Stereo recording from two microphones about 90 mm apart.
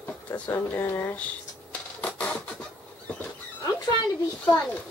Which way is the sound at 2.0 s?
15° left (ahead or behind).